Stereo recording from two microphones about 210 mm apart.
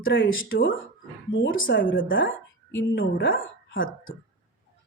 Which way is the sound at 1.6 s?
40° left (ahead or behind).